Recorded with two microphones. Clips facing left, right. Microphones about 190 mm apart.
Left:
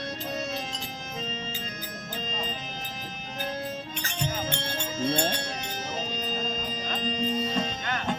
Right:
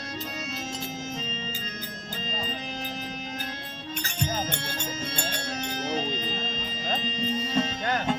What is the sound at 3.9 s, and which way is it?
Music, 45° right (ahead or behind).